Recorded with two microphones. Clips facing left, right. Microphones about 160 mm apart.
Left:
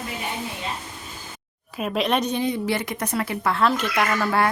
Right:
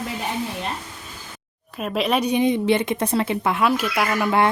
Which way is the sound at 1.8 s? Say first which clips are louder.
Right 1 dB; centre (ahead or behind).